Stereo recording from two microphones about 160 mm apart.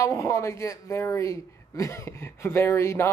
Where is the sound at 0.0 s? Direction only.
20° left (ahead or behind).